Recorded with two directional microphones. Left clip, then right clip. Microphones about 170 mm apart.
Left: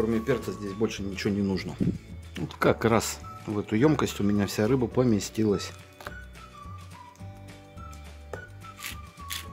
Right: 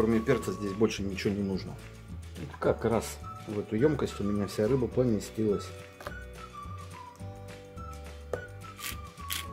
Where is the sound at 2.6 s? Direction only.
40° left (ahead or behind).